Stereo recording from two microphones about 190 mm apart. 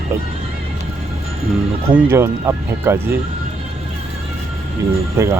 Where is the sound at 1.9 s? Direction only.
10° right (ahead or behind).